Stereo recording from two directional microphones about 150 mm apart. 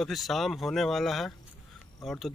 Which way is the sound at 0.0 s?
Centre (ahead or behind).